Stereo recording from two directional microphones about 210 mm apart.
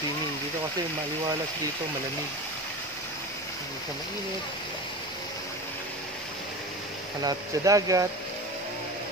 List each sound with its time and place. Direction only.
7.2 s speech: 15° right (ahead or behind)